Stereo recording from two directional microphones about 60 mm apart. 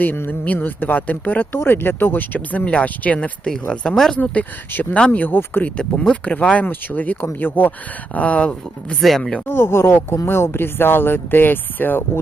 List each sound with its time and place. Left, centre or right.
0.0 s speech: left
3.7 s speech: centre
4.2 s speech: left
5.6 s speech: centre
6.7 s speech: left
9.0 s speech: centre
9.5 s speech: left